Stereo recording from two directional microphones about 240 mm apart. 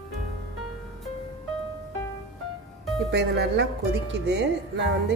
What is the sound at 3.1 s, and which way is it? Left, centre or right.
Speech, right.